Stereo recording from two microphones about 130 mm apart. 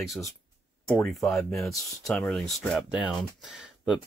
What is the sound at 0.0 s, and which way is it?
Speech, centre (ahead or behind).